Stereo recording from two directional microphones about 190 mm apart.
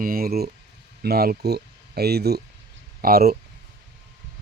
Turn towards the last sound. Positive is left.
turn(degrees=-55)  # may be behind; listen again after turning